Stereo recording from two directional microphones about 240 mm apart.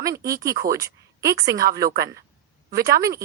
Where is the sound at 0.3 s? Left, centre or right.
Centre.